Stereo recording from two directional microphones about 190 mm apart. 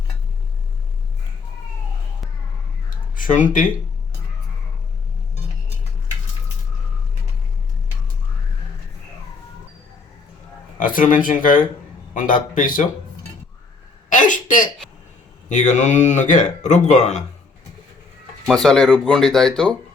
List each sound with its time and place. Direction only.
3.2 s speech: 45° left (ahead or behind)
10.8 s speech: 45° left (ahead or behind)
14.1 s a sound: 40° left (ahead or behind)
15.4 s speech: 40° left (ahead or behind)
18.4 s speech: centre (ahead or behind)